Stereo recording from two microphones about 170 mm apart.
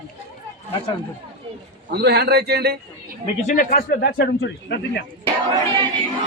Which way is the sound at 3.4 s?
50° left (ahead or behind).